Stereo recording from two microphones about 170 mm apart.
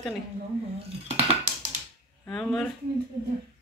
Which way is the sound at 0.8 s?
35° right (ahead or behind).